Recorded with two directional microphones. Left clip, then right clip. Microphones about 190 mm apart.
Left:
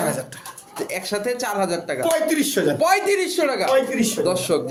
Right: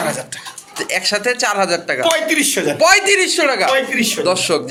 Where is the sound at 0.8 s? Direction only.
Centre (ahead or behind).